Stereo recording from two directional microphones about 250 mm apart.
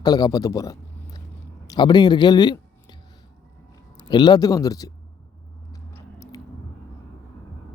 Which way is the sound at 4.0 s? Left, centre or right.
Centre.